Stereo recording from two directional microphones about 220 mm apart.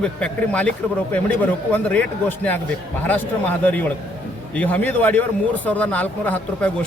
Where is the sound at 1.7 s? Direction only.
5° left (ahead or behind).